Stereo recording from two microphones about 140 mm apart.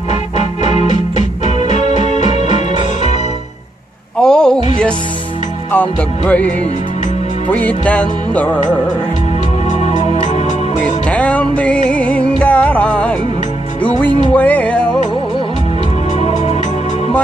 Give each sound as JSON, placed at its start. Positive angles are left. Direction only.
{"t": 1.7, "sound": "music", "side_deg": 55}
{"t": 4.2, "sound": "a sound", "side_deg": 5}
{"t": 5.7, "sound": "music", "side_deg": 10}
{"t": 9.7, "sound": "music", "side_deg": 55}
{"t": 11.1, "sound": "music", "side_deg": 10}
{"t": 16.2, "sound": "music", "side_deg": 50}